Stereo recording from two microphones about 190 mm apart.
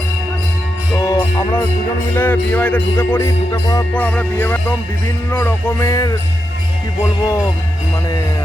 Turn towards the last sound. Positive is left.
turn(degrees=15)  # may be behind; listen again after turning